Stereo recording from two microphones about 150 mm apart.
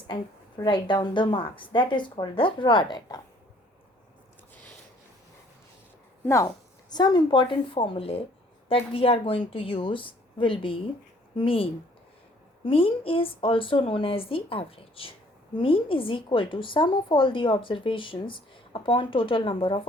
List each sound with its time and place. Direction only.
0.6 s a woman's voice: 30° left (ahead or behind)
6.2 s a woman's voice: 20° left (ahead or behind); by 19.9 s 35° left (ahead or behind)